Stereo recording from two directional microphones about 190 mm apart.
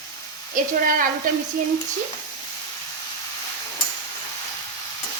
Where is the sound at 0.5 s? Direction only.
45° right (ahead or behind).